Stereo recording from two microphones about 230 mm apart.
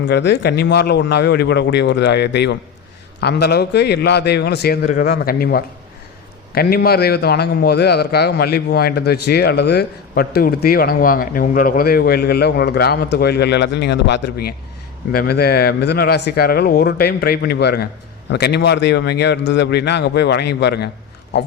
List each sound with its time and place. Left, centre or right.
0.1 s a man's voice: left